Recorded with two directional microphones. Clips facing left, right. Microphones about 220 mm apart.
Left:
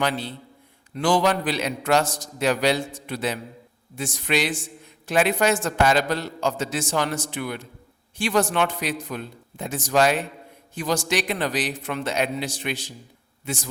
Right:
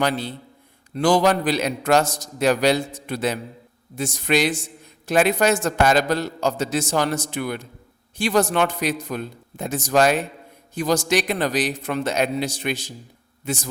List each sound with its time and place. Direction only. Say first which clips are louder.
0.0 s a man's voice: right 3 dB; 40° right (ahead or behind)